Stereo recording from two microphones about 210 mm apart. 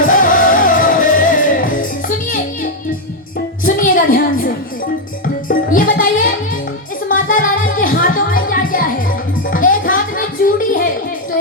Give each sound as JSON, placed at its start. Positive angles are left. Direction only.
{"t": 0.0, "sound": "music", "side_deg": 40}
{"t": 3.7, "sound": "a sound", "side_deg": 40}
{"t": 5.2, "sound": "music", "side_deg": 40}